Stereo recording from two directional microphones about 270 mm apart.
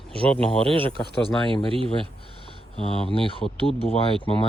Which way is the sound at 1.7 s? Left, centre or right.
Centre.